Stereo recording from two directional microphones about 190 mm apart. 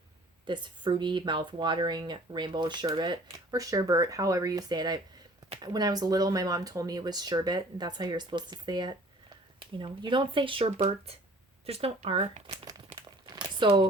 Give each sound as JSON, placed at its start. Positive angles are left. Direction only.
{"t": 0.4, "sound": "speech", "side_deg": -25}
{"t": 13.2, "sound": "crumpling", "side_deg": -20}